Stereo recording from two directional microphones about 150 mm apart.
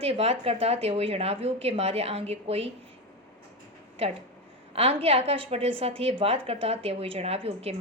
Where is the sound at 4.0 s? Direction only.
45° right (ahead or behind).